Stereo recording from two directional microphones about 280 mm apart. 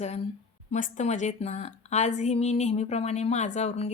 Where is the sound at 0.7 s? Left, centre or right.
Left.